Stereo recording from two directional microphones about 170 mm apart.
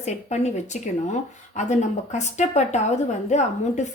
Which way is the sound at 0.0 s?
40° left (ahead or behind).